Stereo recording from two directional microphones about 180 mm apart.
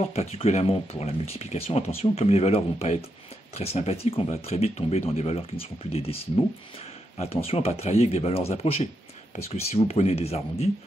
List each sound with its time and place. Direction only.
0.1 s speech: 35° left (ahead or behind)
7.2 s speech: 35° left (ahead or behind)